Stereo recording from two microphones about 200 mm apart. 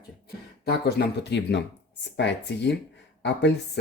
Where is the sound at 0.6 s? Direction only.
55° left (ahead or behind).